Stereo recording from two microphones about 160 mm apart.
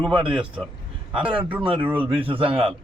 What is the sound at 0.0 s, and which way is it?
Speech, 5° right (ahead or behind).